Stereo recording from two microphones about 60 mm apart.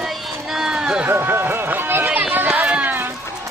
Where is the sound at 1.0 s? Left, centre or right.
Right.